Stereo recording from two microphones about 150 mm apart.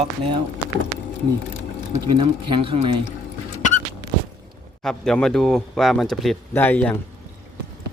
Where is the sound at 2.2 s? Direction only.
35° right (ahead or behind).